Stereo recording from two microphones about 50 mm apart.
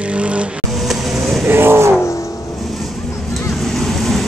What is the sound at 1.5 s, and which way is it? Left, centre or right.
Vehicle, right.